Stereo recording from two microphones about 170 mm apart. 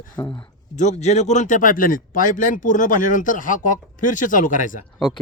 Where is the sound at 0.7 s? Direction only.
45° left (ahead or behind).